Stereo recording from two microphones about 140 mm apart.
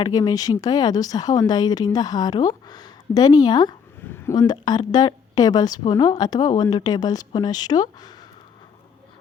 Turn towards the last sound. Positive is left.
turn(degrees=30)  # may be behind; listen again after turning